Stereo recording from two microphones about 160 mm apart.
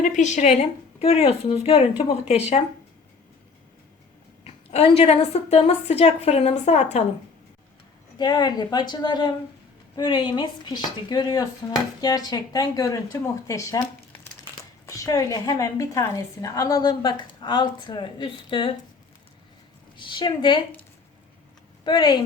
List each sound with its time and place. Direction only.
0.0 s a woman's voice: 50° left (ahead or behind)
4.4 s a woman's voice: 40° left (ahead or behind)
8.2 s a woman's voice: 25° left (ahead or behind)
20.0 s a woman's voice: 30° left (ahead or behind)
21.8 s a woman's voice: 25° left (ahead or behind)